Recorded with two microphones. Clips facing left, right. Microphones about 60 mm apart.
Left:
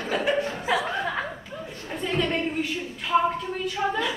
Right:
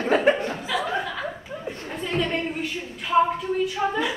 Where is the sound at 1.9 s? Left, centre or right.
Centre.